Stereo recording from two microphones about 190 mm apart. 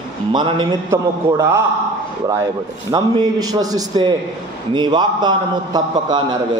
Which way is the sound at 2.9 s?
20° right (ahead or behind).